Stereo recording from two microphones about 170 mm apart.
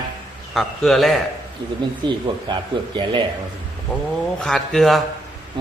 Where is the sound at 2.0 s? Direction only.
25° right (ahead or behind).